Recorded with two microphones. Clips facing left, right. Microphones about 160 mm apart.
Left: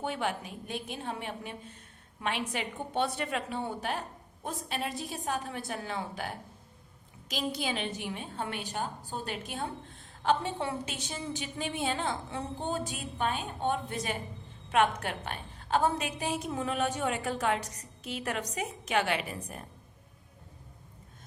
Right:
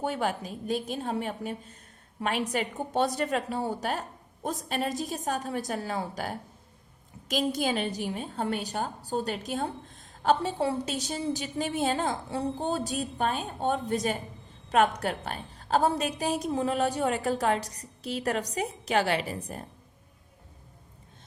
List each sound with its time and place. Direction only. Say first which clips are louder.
0.0 s a woman's voice: right 4 dB; 40° right (ahead or behind)